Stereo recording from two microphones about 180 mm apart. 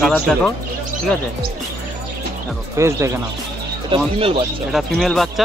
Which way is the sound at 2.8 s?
15° right (ahead or behind).